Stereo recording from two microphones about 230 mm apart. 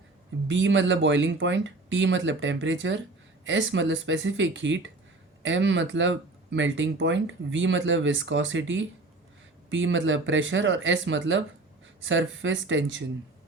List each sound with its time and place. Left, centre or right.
0.4 s speech: right